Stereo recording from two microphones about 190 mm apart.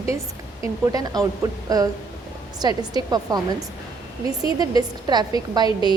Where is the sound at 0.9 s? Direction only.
20° right (ahead or behind).